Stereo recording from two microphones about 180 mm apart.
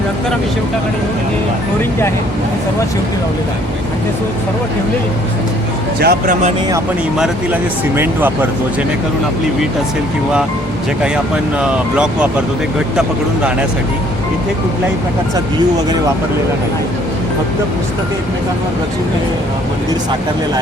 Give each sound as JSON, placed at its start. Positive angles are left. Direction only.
{"t": 6.0, "sound": "speech", "side_deg": -60}
{"t": 7.2, "sound": "speech", "side_deg": -10}
{"t": 11.6, "sound": "speech", "side_deg": -5}